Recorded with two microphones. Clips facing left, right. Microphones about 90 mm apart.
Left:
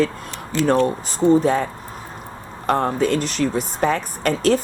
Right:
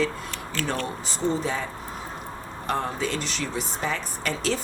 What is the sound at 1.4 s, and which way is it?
Speech, 55° left (ahead or behind).